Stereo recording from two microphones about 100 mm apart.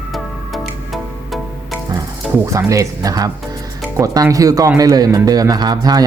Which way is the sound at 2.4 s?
30° right (ahead or behind).